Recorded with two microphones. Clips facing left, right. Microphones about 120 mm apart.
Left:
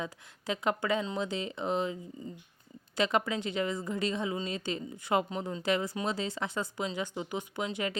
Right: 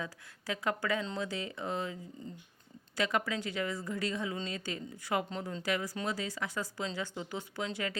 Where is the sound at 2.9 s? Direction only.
25° left (ahead or behind).